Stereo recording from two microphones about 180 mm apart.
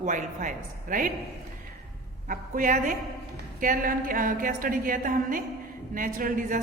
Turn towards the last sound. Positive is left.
turn(degrees=-50)  # may be behind; listen again after turning